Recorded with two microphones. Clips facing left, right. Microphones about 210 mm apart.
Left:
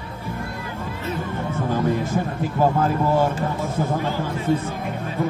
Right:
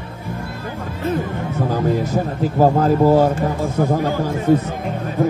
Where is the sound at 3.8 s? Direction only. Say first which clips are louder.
Right 6 dB; 50° right (ahead or behind).